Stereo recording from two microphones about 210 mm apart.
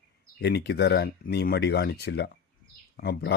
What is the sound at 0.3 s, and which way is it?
Speech, 50° left (ahead or behind).